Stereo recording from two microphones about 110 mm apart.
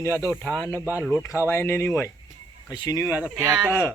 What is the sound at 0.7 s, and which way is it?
Speech, 20° right (ahead or behind).